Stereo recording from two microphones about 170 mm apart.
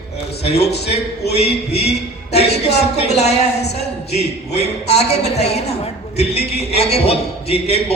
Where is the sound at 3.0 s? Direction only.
40° left (ahead or behind).